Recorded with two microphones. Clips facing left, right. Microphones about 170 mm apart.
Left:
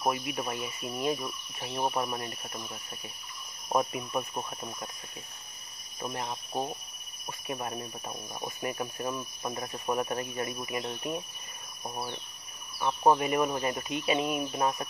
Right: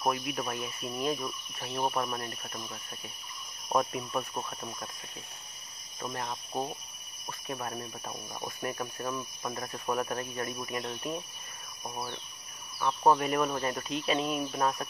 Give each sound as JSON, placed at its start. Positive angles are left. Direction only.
{"t": 0.0, "sound": "speech", "side_deg": 5}
{"t": 5.9, "sound": "speech", "side_deg": 10}
{"t": 12.7, "sound": "speech", "side_deg": 15}
{"t": 13.2, "sound": "speech", "side_deg": 5}